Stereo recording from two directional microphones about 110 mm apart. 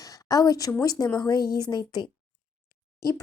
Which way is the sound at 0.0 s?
35° left (ahead or behind).